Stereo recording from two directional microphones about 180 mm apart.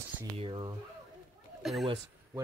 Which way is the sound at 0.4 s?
25° right (ahead or behind).